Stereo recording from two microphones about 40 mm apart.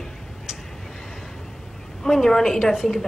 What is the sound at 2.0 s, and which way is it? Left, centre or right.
Speech, centre.